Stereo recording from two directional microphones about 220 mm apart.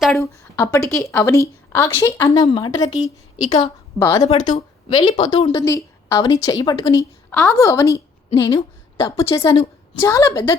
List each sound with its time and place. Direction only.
0.0 s speech: centre (ahead or behind)
0.5 s a woman's voice: 10° left (ahead or behind)
3.9 s a woman's voice: 15° left (ahead or behind)
4.4 s a woman's voice: 30° left (ahead or behind); by 10.6 s 15° left (ahead or behind)